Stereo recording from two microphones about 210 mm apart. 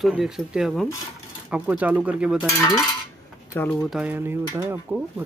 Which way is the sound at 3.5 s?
5° left (ahead or behind).